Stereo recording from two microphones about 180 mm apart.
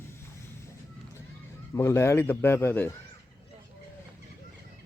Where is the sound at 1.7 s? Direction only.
15° left (ahead or behind).